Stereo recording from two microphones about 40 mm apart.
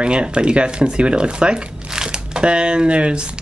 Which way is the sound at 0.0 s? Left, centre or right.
Right.